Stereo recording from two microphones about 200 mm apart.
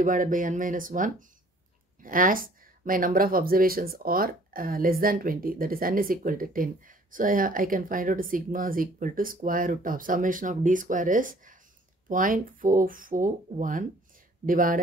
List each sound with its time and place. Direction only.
0.0 s speech: 40° right (ahead or behind)